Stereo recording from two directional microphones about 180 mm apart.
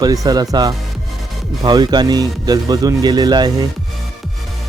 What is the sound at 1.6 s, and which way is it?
Speech, 25° right (ahead or behind).